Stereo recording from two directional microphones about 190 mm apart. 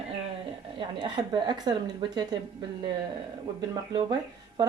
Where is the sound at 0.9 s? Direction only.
25° right (ahead or behind).